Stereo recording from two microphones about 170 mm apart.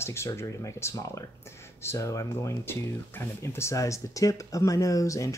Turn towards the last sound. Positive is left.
turn(degrees=20)  # may be behind; listen again after turning